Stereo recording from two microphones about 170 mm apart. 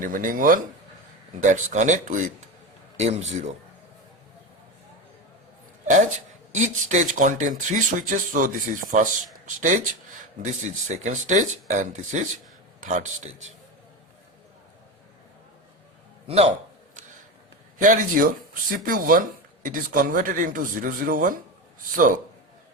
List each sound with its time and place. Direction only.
0.0 s a man's voice: 50° right (ahead or behind)
5.9 s speech: 45° right (ahead or behind)
16.2 s a man's voice: 40° right (ahead or behind)
17.7 s speech: 50° right (ahead or behind)